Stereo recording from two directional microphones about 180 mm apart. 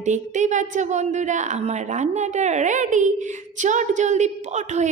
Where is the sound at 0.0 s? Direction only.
40° right (ahead or behind).